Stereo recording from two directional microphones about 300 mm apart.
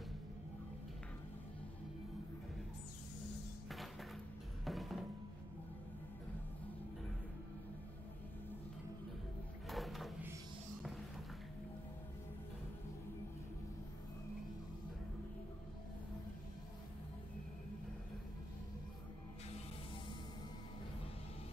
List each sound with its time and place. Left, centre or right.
4.6 s music: centre
9.7 s drawer open or close: centre
10.8 s a sound: centre